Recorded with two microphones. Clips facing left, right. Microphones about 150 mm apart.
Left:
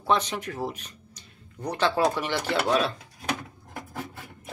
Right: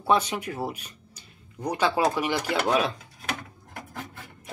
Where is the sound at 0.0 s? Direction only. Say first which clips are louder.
Right 2 dB; 10° right (ahead or behind).